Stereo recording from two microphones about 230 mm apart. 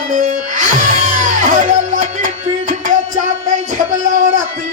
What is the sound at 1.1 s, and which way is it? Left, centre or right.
Music, right.